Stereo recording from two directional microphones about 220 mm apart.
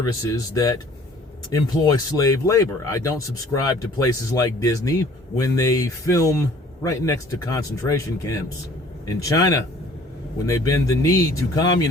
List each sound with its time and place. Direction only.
0.0 s speech: 15° left (ahead or behind)